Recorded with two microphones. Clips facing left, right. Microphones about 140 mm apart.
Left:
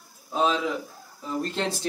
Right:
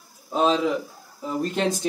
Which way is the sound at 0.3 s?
20° right (ahead or behind).